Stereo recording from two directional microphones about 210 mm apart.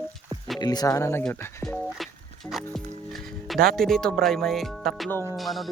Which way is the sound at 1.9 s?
Centre (ahead or behind).